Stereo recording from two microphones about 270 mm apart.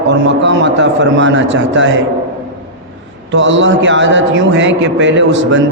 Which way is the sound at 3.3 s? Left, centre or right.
Right.